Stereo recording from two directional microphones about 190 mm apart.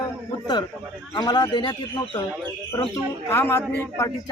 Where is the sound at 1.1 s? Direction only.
20° left (ahead or behind).